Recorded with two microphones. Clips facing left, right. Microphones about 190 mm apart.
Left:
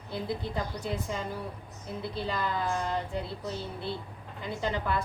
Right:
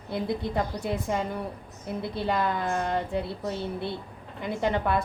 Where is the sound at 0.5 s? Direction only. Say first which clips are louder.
Right 5 dB; 60° right (ahead or behind).